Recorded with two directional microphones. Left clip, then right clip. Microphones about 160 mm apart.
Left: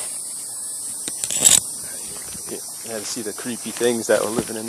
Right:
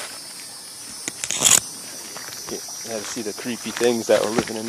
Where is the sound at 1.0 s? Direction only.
35° left (ahead or behind).